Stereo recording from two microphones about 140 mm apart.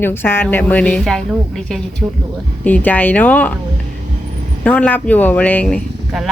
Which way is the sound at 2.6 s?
10° left (ahead or behind).